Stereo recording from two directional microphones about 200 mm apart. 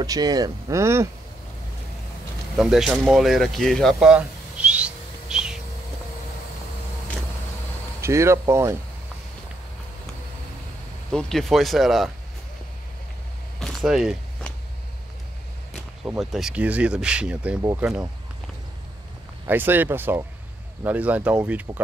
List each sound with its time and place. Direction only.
0.0 s speech: 20° right (ahead or behind)
2.5 s a sound: centre (ahead or behind)
8.0 s speech: 15° right (ahead or behind)
11.1 s speech: 5° left (ahead or behind)
13.6 s a sound: centre (ahead or behind)
15.7 s speech: centre (ahead or behind)
19.4 s speech: 10° right (ahead or behind)